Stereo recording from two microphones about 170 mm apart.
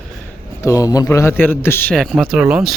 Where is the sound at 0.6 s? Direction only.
20° left (ahead or behind).